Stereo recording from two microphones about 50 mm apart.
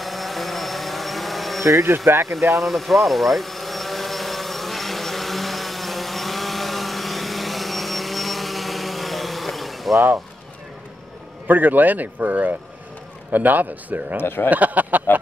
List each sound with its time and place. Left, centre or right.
0.0 s a sound: centre
1.6 s speech: right
2.6 s insect: centre
11.4 s speech: right
14.2 s speech: left
14.5 s speech: right